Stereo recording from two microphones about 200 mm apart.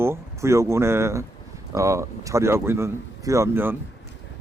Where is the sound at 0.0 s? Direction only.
15° right (ahead or behind).